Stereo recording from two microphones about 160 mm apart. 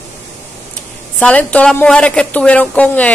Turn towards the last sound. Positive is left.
turn(degrees=10)  # may be behind; listen again after turning